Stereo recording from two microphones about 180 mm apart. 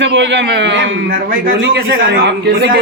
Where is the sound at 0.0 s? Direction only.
75° right (ahead or behind).